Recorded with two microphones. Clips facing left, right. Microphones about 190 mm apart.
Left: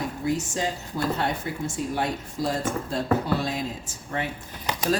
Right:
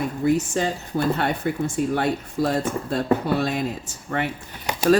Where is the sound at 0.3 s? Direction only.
60° right (ahead or behind).